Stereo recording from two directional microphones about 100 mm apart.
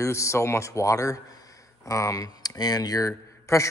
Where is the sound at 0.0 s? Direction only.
30° left (ahead or behind).